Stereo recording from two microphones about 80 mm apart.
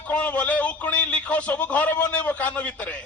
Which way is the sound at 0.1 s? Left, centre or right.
Centre.